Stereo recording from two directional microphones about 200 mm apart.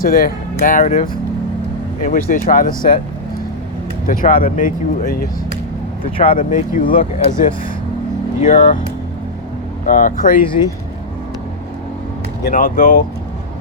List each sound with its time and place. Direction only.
0.0 s speech: 45° left (ahead or behind)
2.0 s speech: 45° left (ahead or behind)
4.0 s speech: 40° left (ahead or behind)
6.3 s speech: 40° left (ahead or behind)
9.8 s speech: 40° left (ahead or behind)
12.5 s speech: 45° left (ahead or behind)